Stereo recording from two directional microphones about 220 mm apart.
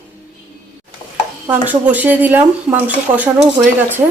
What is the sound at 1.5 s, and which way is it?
Speech, 5° right (ahead or behind).